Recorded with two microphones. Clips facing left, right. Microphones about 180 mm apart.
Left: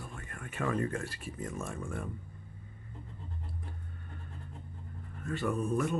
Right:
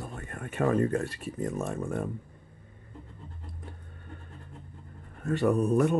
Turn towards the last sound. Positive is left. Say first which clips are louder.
# right 7 dB
turn(degrees=-40)  # may be behind; listen again after turning